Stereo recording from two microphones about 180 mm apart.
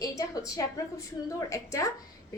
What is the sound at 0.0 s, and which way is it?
A woman's voice, 20° left (ahead or behind).